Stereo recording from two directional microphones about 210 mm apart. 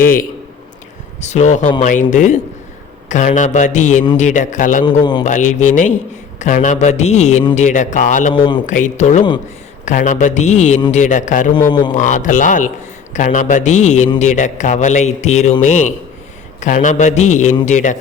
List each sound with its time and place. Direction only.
0.0 s a man's voice: 40° left (ahead or behind)
8.3 s speech: 20° left (ahead or behind)
8.6 s a man's voice: 35° left (ahead or behind)
11.7 s speech: 20° left (ahead or behind)
11.9 s a man's voice: 35° left (ahead or behind)